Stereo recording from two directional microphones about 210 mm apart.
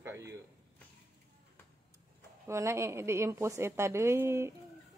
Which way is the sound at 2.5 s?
15° right (ahead or behind).